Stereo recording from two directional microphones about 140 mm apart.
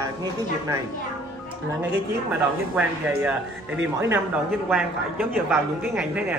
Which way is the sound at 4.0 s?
20° right (ahead or behind).